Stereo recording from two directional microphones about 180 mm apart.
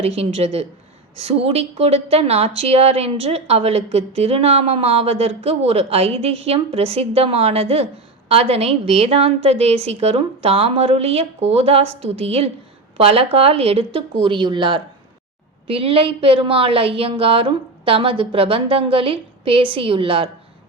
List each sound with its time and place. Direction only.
0.2 s a woman's voice: 35° right (ahead or behind)